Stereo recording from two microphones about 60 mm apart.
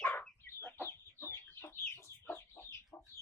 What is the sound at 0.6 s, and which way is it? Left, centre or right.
Chicken, left.